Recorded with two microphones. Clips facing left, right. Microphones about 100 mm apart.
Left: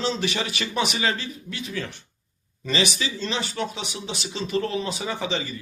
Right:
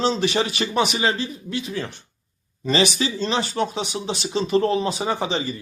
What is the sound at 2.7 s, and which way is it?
Speech, 35° right (ahead or behind).